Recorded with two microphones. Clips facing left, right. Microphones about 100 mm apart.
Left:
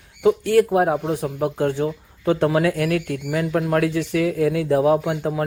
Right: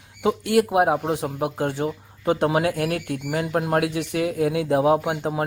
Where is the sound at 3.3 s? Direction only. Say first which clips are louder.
Left 2 dB; 35° right (ahead or behind).